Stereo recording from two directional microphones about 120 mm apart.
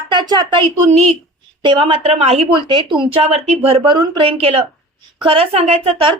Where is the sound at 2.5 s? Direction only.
40° right (ahead or behind).